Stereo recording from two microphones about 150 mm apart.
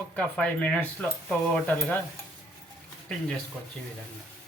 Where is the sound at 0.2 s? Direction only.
5° left (ahead or behind).